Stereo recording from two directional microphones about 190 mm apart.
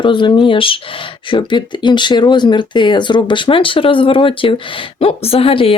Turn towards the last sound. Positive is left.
turn(degrees=30)  # may be behind; listen again after turning